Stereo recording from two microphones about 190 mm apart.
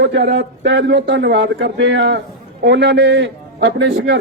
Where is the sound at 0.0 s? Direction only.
60° right (ahead or behind).